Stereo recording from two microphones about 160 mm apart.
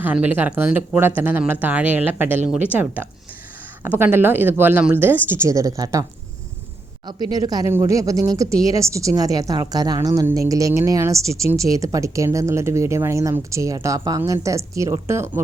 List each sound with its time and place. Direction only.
0.0 s speech: 10° right (ahead or behind)
7.1 s speech: 25° right (ahead or behind)